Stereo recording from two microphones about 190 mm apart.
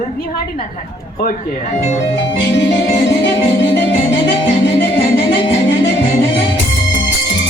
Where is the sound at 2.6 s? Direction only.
70° left (ahead or behind).